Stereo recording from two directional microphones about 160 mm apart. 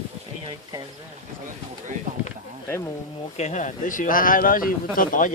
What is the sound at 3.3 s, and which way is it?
A man's voice, 45° left (ahead or behind).